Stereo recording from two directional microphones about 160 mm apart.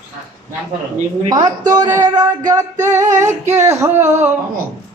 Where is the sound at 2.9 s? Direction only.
20° right (ahead or behind).